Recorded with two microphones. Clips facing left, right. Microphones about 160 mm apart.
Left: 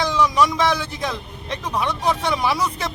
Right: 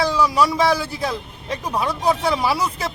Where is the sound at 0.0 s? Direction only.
10° right (ahead or behind).